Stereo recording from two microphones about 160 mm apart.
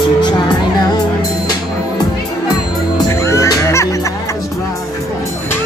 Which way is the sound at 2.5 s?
20° left (ahead or behind).